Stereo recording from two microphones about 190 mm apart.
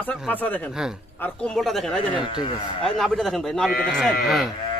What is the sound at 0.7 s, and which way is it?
Speech, 5° right (ahead or behind).